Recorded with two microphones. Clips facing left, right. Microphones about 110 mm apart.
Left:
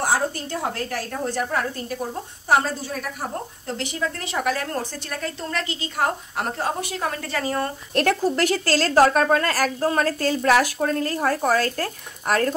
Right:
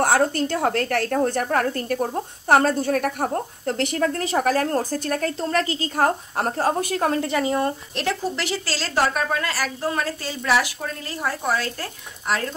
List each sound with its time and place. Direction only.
0.0 s a woman's voice: 60° right (ahead or behind)
4.1 s a woman's voice: 40° right (ahead or behind)
7.1 s a woman's voice: 20° right (ahead or behind)
7.9 s a woman's voice: 50° left (ahead or behind)